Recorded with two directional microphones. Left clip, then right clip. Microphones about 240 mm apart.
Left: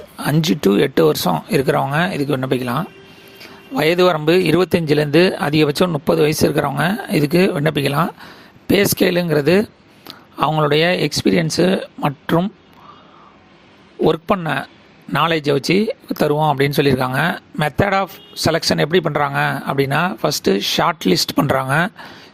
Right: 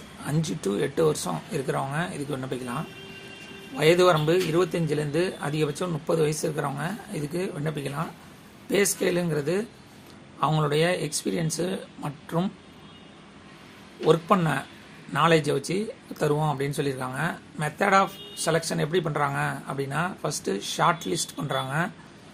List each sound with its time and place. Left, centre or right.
0.2 s speech: left
14.0 s speech: left